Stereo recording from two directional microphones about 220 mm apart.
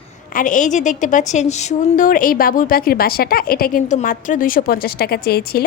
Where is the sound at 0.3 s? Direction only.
35° left (ahead or behind).